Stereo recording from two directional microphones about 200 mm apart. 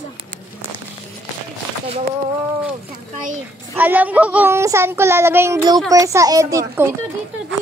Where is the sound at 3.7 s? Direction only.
10° right (ahead or behind).